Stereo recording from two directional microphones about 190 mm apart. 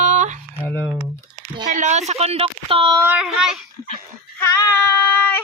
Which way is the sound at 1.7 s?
40° right (ahead or behind).